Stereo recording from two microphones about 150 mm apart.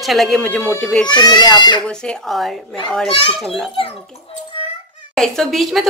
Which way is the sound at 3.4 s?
5° left (ahead or behind).